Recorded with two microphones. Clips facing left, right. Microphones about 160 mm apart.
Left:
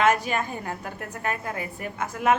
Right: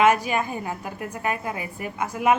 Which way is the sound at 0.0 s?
10° right (ahead or behind).